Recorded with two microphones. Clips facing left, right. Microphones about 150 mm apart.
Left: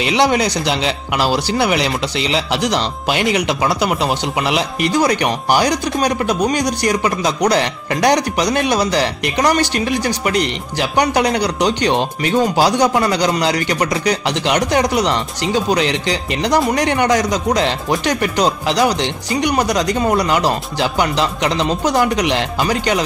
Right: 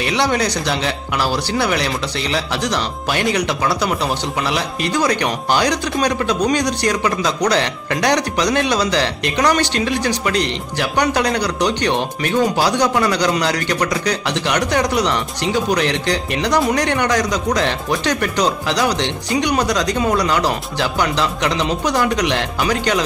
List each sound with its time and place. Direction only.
0.0 s speech: 15° left (ahead or behind)
15.9 s speech: 60° right (ahead or behind)
16.7 s speech: 10° left (ahead or behind)